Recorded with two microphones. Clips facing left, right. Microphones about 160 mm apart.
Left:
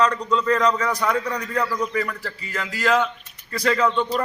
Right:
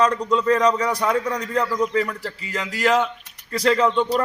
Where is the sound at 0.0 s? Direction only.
25° right (ahead or behind).